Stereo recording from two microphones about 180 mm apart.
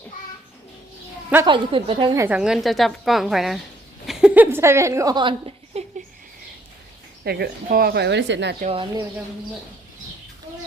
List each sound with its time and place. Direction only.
1.5 s a woman's voice: 30° right (ahead or behind)
2.2 s a woman's voice: 5° right (ahead or behind); by 5.8 s 30° right (ahead or behind)
7.3 s a woman's voice: 60° right (ahead or behind); by 8.5 s 75° right (ahead or behind)
8.6 s speech: 30° right (ahead or behind)